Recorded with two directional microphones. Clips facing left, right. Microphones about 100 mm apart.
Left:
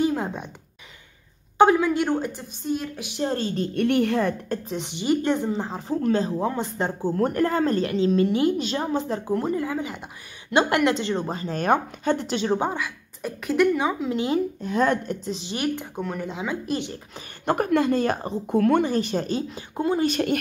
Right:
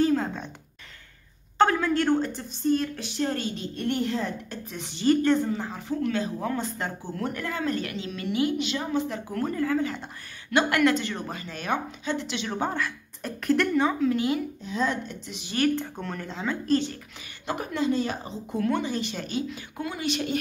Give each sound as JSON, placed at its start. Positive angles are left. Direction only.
{"t": 0.0, "sound": "a sound", "side_deg": 15}
{"t": 1.6, "sound": "a woman's voice", "side_deg": 15}
{"t": 3.2, "sound": "a woman's voice", "side_deg": 25}
{"t": 3.7, "sound": "a woman's voice", "side_deg": 70}
{"t": 4.6, "sound": "a woman's voice", "side_deg": 20}
{"t": 7.0, "sound": "a woman's voice", "side_deg": 40}
{"t": 9.3, "sound": "a woman's voice", "side_deg": 20}
{"t": 10.5, "sound": "a woman's voice", "side_deg": 25}
{"t": 12.5, "sound": "a woman's voice", "side_deg": 15}
{"t": 14.6, "sound": "a woman's voice", "side_deg": 55}
{"t": 15.2, "sound": "a woman's voice", "side_deg": 30}
{"t": 15.5, "sound": "a woman's voice", "side_deg": 15}
{"t": 17.5, "sound": "speech", "side_deg": 55}